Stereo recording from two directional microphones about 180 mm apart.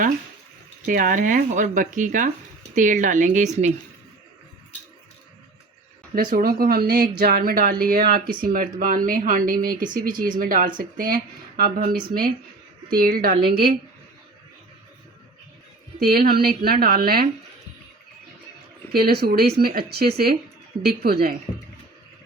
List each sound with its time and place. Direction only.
0.9 s speech: 50° right (ahead or behind)
6.3 s a woman's voice: 55° right (ahead or behind)
16.0 s a woman's voice: 55° right (ahead or behind)
18.9 s a woman's voice: 60° right (ahead or behind)